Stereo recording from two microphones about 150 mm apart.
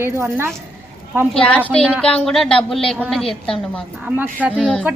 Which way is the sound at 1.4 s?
10° left (ahead or behind).